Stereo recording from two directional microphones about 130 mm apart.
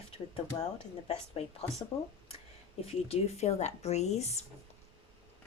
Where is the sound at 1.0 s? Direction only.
50° left (ahead or behind).